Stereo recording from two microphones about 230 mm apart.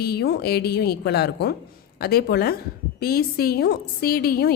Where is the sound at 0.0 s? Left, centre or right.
Left.